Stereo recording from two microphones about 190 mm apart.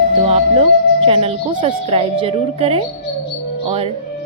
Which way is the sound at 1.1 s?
30° right (ahead or behind).